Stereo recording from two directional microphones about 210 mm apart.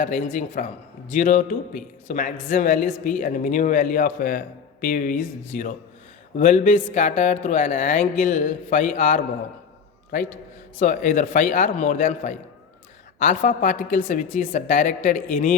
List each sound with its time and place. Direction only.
0.0 s a woman's voice: 40° left (ahead or behind)